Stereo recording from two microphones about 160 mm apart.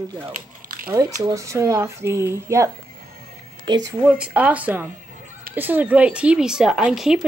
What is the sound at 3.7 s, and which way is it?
Speech, 30° right (ahead or behind).